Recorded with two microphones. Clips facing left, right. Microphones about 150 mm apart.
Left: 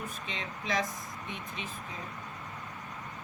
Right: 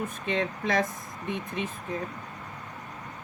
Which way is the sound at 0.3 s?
55° right (ahead or behind).